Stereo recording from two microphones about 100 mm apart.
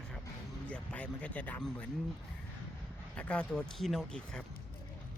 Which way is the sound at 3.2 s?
10° left (ahead or behind).